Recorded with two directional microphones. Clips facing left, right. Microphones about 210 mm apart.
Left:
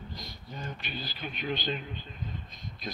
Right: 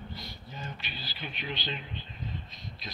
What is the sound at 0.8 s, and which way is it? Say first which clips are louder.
A man's voice: left 3 dB; 45° left (ahead or behind).